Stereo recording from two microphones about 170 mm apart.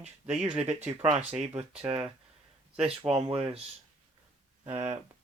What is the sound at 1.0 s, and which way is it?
Speech, 40° right (ahead or behind).